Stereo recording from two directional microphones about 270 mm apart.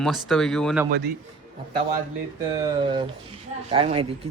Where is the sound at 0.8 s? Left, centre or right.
Right.